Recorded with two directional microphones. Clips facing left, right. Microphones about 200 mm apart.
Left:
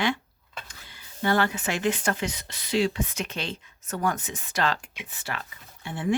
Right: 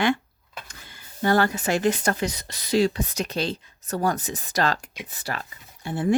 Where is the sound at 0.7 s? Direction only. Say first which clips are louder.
Right 2 dB; 45° right (ahead or behind).